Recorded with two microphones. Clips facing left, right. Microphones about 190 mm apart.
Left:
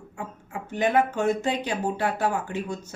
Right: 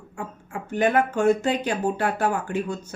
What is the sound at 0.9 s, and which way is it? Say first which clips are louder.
Speech: right 2 dB; 20° left (ahead or behind).